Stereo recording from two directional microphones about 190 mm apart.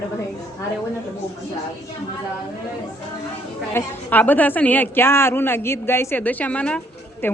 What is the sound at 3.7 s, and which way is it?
A woman's voice, 10° left (ahead or behind).